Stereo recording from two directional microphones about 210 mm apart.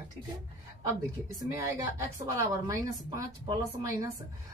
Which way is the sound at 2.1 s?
15° right (ahead or behind).